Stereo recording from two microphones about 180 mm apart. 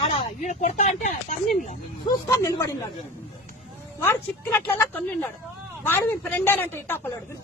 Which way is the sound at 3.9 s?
15° left (ahead or behind).